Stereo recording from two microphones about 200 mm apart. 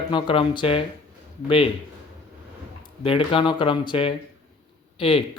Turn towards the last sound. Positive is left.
turn(degrees=25)  # may be behind; listen again after turning